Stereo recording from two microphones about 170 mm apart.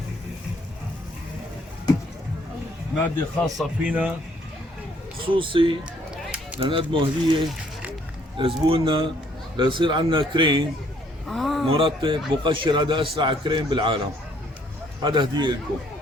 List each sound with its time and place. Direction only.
3.4 s speech: 5° right (ahead or behind)
5.1 s a man's voice: 30° right (ahead or behind)
11.3 s speech: centre (ahead or behind)
11.7 s a man's voice: 30° right (ahead or behind)